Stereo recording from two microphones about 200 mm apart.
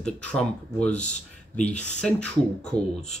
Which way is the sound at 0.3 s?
5° left (ahead or behind).